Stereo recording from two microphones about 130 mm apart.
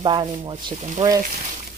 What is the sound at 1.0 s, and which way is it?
Speech, 65° right (ahead or behind).